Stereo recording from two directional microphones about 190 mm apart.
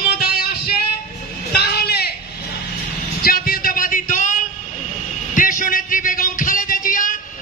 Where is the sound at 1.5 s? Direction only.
55° left (ahead or behind).